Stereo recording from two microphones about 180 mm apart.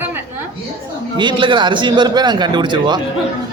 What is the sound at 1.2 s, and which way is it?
A man's voice, 25° right (ahead or behind).